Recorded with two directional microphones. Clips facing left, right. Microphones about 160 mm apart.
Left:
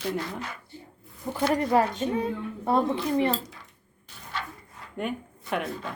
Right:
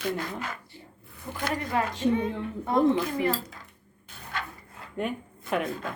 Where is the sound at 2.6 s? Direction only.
30° left (ahead or behind).